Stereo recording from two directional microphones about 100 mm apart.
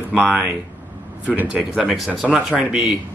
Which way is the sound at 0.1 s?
15° right (ahead or behind).